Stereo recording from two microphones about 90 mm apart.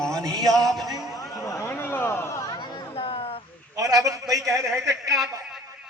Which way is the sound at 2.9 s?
90° left.